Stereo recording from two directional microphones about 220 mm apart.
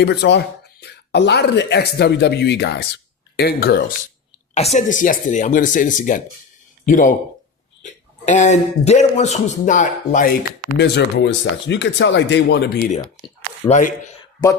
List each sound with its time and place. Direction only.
0.0 s speech: 50° left (ahead or behind)
4.5 s speech: 30° left (ahead or behind)
8.2 s speech: 35° left (ahead or behind)
10.7 s speech: 50° left (ahead or behind)
13.2 s speech: 30° left (ahead or behind)